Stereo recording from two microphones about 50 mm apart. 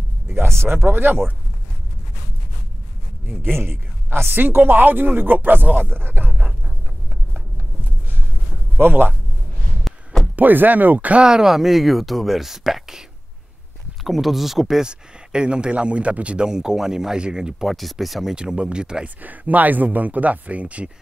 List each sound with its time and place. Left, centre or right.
0.6 s speech: right
3.5 s speech: right
8.7 s a man's voice: right
9.8 s a sound: centre
10.3 s speech: right
11.2 s speech: centre
14.0 s speech: centre
14.9 s speech: centre
17.6 s speech: centre
18.3 s speech: centre
19.0 s speech: right